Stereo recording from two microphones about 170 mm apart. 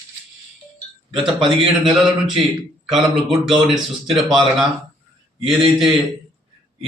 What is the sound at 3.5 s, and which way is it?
Speech, centre (ahead or behind).